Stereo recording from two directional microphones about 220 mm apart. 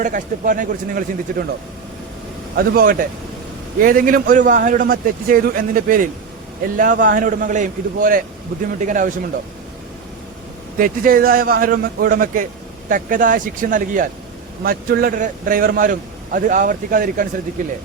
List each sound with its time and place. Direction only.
0.0 s a man's voice: 35° right (ahead or behind)
2.6 s a man's voice: 40° right (ahead or behind)
10.8 s a man's voice: 40° right (ahead or behind)